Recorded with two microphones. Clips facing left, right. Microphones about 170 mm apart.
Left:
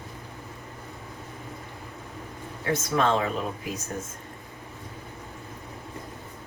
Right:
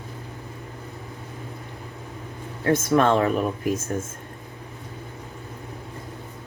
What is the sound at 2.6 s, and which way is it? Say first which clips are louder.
Speech: right 6 dB; 55° right (ahead or behind).